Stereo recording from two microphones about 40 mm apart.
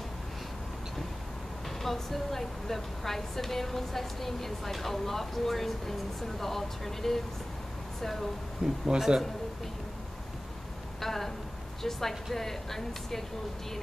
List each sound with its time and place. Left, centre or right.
1.8 s speech: centre
8.6 s speech: centre
11.0 s speech: centre